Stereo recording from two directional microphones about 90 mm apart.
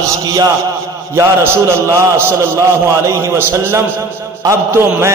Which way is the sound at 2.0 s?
30° right (ahead or behind).